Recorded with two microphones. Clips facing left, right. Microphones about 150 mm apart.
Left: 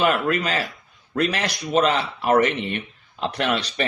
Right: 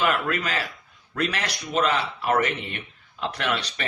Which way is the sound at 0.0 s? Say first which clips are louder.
Left 4 dB; 25° left (ahead or behind).